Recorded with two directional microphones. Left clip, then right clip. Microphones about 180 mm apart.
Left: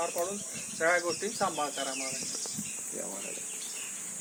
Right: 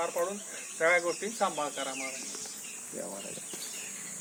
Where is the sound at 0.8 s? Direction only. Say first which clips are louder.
Right 1 dB; 15° right (ahead or behind).